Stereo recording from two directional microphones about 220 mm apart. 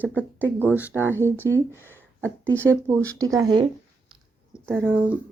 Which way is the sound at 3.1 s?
15° right (ahead or behind).